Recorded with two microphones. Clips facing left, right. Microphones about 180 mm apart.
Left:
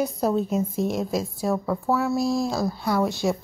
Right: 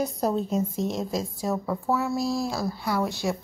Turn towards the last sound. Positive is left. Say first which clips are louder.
# left 4 dB
turn(degrees=15)  # may be behind; listen again after turning